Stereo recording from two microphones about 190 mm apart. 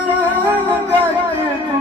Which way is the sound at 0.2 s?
10° right (ahead or behind).